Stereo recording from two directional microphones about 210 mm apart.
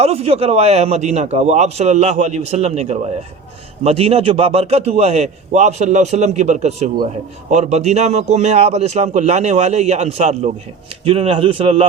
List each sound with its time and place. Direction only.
0.0 s a man's voice: 30° right (ahead or behind)